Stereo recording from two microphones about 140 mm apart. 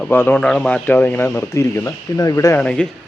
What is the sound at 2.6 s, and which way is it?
Speech, 5° left (ahead or behind).